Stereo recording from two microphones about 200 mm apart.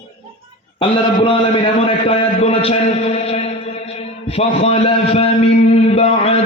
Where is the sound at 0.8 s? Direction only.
25° left (ahead or behind).